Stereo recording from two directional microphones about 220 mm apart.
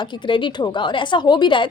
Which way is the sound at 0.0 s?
20° left (ahead or behind).